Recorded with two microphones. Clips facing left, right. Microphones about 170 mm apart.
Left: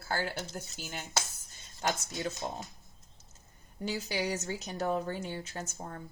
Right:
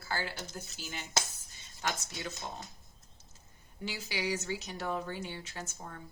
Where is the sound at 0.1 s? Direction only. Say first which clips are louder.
Left 3 dB; 50° left (ahead or behind).